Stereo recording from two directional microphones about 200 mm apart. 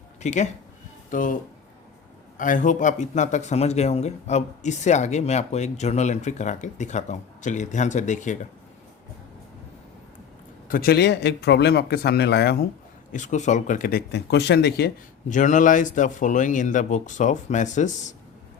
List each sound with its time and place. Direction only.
0.2 s speech: 35° left (ahead or behind)
2.4 s speech: 40° left (ahead or behind)
10.7 s speech: 50° left (ahead or behind)
13.1 s speech: 40° left (ahead or behind); by 14.9 s 55° left (ahead or behind)
15.3 s speech: 40° left (ahead or behind)